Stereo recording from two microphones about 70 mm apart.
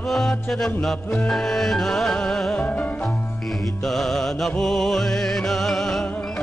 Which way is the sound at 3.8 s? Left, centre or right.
Centre.